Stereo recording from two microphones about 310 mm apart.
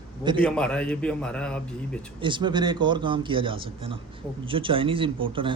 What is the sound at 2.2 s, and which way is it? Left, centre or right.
A man's voice, centre.